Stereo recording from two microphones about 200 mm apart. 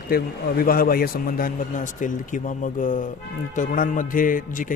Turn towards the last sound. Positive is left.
turn(degrees=40)  # may be behind; listen again after turning